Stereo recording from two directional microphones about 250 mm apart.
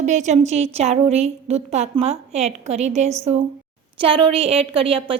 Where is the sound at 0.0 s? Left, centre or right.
Right.